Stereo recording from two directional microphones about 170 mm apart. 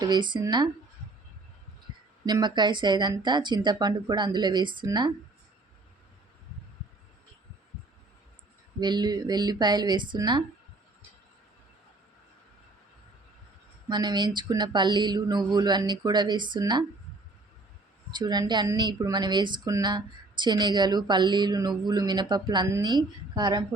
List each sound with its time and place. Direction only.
0.0 s a woman's voice: 25° right (ahead or behind)
2.2 s a woman's voice: 25° right (ahead or behind)
8.8 s a woman's voice: 25° right (ahead or behind)
13.8 s a woman's voice: 25° right (ahead or behind)
18.1 s a woman's voice: 25° right (ahead or behind)